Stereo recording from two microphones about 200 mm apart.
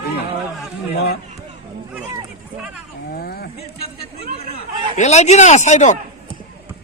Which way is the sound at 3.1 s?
50° left (ahead or behind).